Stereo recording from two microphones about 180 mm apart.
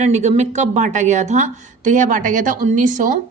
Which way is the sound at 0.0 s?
40° right (ahead or behind).